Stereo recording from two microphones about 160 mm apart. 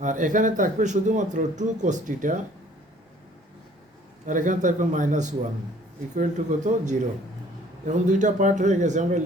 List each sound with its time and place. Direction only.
0.0 s speech: 50° right (ahead or behind)
4.3 s speech: 50° right (ahead or behind)